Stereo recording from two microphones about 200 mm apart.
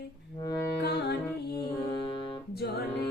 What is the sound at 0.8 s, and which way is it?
Music, 55° left (ahead or behind).